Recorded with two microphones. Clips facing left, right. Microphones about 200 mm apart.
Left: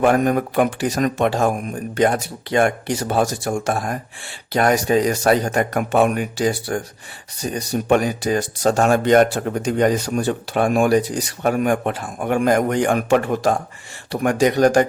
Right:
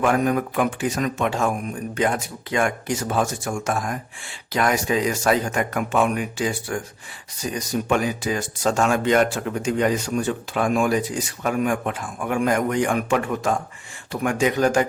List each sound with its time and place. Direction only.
0.0 s speech: 40° left (ahead or behind)
5.9 s speech: 55° left (ahead or behind); by 6.8 s 35° left (ahead or behind)
7.7 s speech: 60° left (ahead or behind)
8.0 s speech: 35° left (ahead or behind)